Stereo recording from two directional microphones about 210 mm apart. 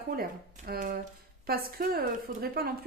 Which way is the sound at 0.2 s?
45° right (ahead or behind).